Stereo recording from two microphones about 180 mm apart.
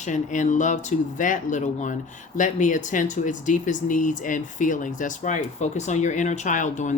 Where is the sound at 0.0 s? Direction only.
45° left (ahead or behind).